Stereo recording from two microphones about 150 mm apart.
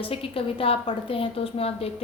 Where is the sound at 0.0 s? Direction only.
40° left (ahead or behind).